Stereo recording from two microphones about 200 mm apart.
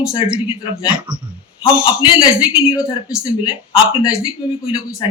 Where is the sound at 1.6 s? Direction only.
25° left (ahead or behind).